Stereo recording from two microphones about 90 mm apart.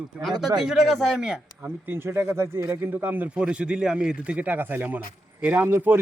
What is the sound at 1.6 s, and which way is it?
A man's voice, 25° right (ahead or behind).